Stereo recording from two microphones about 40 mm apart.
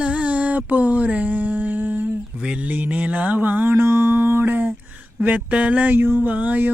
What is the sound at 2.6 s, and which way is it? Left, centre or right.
Speech, right.